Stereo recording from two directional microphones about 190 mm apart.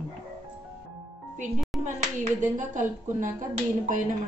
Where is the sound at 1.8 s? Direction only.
40° right (ahead or behind).